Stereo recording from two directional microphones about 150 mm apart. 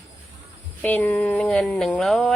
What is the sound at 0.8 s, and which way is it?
Speech, 10° left (ahead or behind).